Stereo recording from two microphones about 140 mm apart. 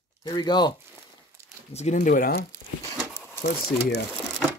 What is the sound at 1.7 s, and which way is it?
Speech, 60° left (ahead or behind).